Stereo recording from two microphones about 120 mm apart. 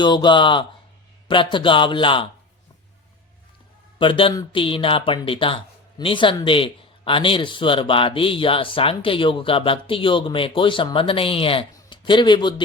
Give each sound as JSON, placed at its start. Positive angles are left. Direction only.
{"t": 0.0, "sound": "speech", "side_deg": 40}
{"t": 3.9, "sound": "a man's voice", "side_deg": 45}